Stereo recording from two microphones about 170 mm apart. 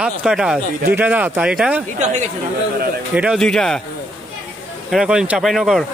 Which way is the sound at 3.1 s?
5° right (ahead or behind).